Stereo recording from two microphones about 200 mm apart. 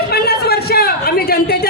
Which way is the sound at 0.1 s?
50° left (ahead or behind).